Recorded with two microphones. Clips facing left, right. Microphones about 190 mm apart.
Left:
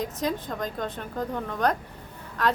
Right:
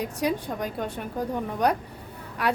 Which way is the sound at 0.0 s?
10° right (ahead or behind).